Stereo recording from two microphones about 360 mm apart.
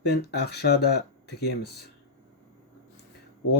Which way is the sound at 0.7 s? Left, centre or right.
Left.